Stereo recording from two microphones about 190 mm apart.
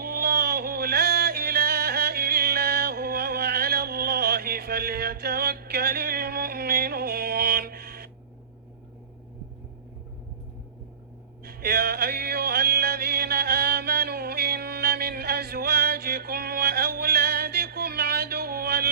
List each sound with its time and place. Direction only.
0.0 s music: 55° right (ahead or behind)
11.4 s music: 55° right (ahead or behind)